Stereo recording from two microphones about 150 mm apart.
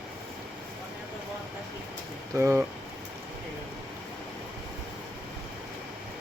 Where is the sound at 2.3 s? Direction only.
15° right (ahead or behind).